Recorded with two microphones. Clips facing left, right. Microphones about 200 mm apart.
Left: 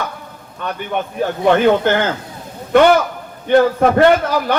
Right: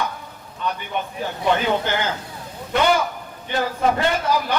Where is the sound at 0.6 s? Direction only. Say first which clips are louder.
Left 4 dB; 60° left (ahead or behind).